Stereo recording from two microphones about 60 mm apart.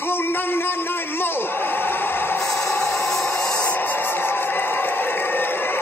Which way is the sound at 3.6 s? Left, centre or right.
Left.